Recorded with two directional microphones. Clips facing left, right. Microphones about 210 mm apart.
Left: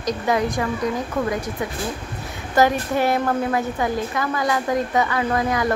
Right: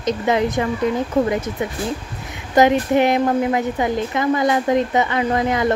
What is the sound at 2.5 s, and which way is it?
A woman's voice, 20° right (ahead or behind).